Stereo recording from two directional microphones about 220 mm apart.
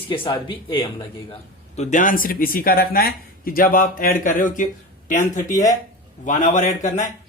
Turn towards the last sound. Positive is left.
turn(degrees=35)  # may be behind; listen again after turning